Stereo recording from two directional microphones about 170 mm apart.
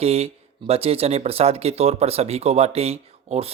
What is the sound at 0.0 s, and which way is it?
A man's voice, 35° right (ahead or behind).